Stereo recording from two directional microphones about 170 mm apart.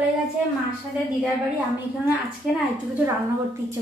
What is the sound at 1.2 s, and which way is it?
Speech, 5° right (ahead or behind).